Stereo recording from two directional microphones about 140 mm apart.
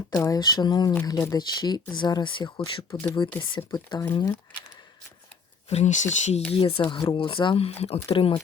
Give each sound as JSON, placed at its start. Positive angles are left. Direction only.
{"t": 0.1, "sound": "speech", "side_deg": 25}
{"t": 5.6, "sound": "speech", "side_deg": 55}
{"t": 6.5, "sound": "speech", "side_deg": 40}